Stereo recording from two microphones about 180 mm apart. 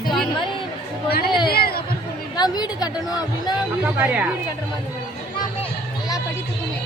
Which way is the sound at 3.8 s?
10° right (ahead or behind).